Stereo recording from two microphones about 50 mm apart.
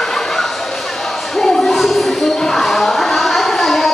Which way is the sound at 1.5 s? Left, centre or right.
Centre.